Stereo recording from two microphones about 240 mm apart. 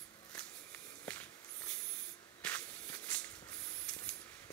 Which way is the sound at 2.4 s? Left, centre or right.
Centre.